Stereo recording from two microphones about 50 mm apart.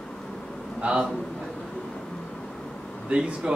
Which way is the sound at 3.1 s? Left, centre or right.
Centre.